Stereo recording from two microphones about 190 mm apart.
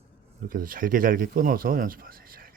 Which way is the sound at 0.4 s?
45° right (ahead or behind).